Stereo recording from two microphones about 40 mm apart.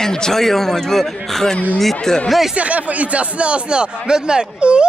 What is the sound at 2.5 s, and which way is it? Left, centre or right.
Speech, right.